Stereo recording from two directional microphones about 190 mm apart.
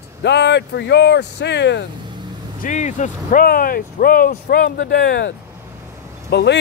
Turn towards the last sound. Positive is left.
turn(degrees=60)  # may be behind; listen again after turning